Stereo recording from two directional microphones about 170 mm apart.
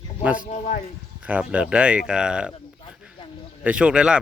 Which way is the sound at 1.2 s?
5° right (ahead or behind).